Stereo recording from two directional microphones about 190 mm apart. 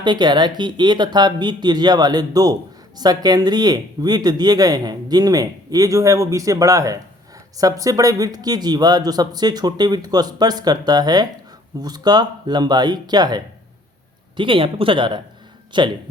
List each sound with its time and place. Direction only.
0.0 s speech: 25° right (ahead or behind)